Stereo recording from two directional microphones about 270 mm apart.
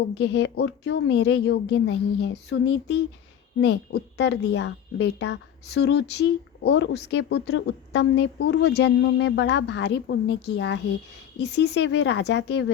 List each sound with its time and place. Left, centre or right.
0.1 s a woman's voice: left